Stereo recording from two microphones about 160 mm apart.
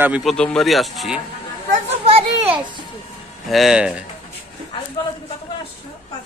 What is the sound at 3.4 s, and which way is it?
Speech, centre (ahead or behind).